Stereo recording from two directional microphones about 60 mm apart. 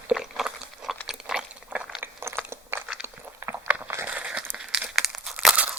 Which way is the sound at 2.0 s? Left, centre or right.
Right.